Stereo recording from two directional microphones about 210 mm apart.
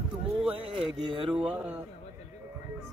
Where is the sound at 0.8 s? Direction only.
25° right (ahead or behind).